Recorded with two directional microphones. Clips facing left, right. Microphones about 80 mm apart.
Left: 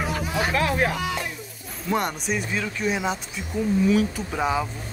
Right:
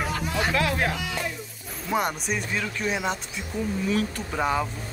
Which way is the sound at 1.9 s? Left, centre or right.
Centre.